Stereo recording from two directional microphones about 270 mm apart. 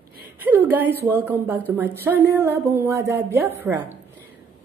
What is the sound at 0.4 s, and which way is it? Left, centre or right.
A woman's voice, centre.